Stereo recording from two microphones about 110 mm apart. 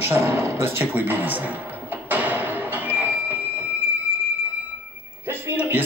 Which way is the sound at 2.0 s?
15° right (ahead or behind).